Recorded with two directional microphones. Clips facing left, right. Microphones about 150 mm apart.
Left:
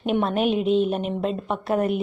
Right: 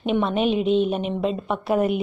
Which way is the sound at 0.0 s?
5° left (ahead or behind).